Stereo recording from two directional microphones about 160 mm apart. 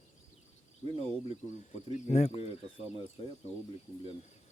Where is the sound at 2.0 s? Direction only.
40° left (ahead or behind).